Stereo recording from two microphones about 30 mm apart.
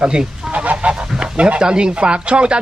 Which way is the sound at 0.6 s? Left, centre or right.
Right.